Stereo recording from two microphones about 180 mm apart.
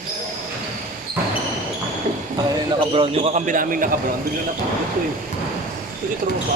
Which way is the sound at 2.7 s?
30° right (ahead or behind).